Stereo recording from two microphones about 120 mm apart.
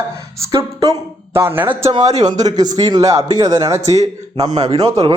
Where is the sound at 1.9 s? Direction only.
35° right (ahead or behind).